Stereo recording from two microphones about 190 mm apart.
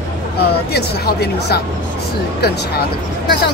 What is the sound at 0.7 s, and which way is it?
Speech, 55° left (ahead or behind).